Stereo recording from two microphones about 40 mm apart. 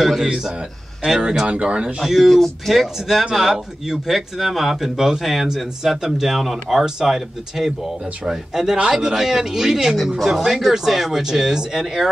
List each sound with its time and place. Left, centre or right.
0.2 s speech: centre
1.5 s speech: right
2.0 s speech: centre
2.2 s speech: centre